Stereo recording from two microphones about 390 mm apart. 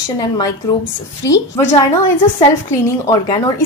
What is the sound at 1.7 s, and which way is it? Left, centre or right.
A woman's voice, centre.